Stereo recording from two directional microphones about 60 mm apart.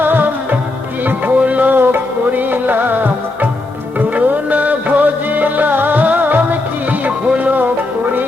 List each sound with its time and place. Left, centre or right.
0.0 s music: right